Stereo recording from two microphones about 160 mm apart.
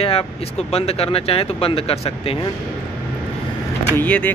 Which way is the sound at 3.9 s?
10° left (ahead or behind).